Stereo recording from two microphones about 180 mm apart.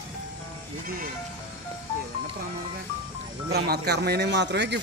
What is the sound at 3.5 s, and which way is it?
Speech, 65° right (ahead or behind).